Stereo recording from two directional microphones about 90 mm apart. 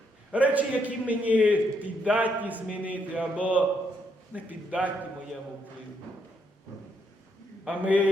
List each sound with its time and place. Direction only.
0.3 s a man's voice: 15° right (ahead or behind)
7.6 s a man's voice: 15° right (ahead or behind)